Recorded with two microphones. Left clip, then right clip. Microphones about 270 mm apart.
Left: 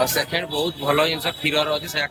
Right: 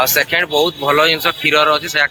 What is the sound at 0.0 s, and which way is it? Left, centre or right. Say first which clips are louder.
Speech: right 7 dB; centre.